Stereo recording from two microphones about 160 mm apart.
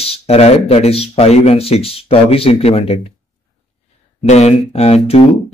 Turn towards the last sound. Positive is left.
turn(degrees=40)  # may be behind; listen again after turning